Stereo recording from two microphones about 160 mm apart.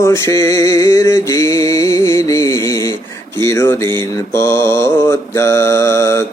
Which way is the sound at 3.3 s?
20° left (ahead or behind).